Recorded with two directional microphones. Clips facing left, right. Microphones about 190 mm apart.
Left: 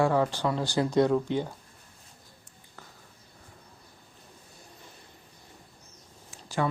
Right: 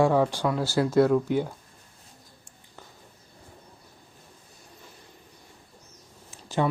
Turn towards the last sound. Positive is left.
turn(degrees=-20)  # may be behind; listen again after turning